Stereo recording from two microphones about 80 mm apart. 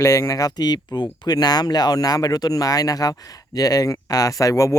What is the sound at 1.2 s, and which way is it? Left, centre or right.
Speech, left.